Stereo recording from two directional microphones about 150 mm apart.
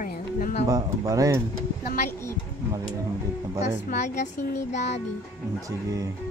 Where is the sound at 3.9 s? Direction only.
55° left (ahead or behind).